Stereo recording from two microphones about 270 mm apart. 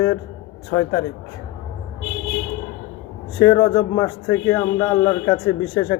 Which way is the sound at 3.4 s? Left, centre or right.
Centre.